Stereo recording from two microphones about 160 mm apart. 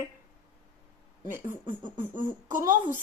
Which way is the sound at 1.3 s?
15° right (ahead or behind).